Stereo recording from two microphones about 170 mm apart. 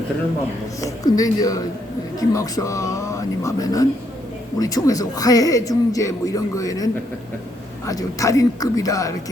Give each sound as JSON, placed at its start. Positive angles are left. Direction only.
{"t": 0.8, "sound": "speech", "side_deg": 20}